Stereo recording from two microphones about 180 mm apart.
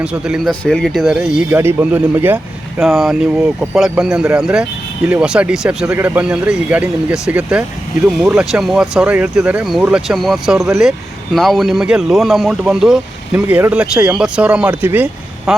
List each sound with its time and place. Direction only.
0.0 s speech: 5° right (ahead or behind)